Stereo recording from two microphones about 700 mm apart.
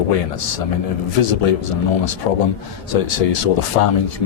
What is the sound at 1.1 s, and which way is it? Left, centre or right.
A man's voice, left.